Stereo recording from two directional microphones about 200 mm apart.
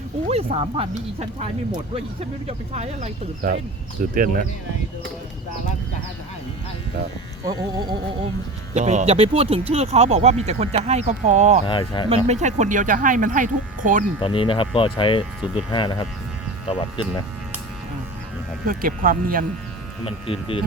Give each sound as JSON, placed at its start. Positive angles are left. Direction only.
{"t": 0.3, "sound": "speech", "side_deg": -30}
{"t": 7.4, "sound": "speech", "side_deg": -20}
{"t": 8.7, "sound": "speech", "side_deg": -35}
{"t": 11.6, "sound": "speech", "side_deg": 25}
{"t": 12.0, "sound": "speech", "side_deg": -30}
{"t": 14.2, "sound": "speech", "side_deg": 25}
{"t": 18.6, "sound": "speech", "side_deg": -45}
{"t": 20.1, "sound": "speech", "side_deg": 25}